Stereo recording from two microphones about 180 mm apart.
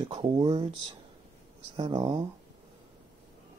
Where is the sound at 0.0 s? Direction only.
25° right (ahead or behind).